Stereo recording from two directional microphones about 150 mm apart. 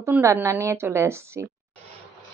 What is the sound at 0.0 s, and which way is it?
Speech, 20° right (ahead or behind).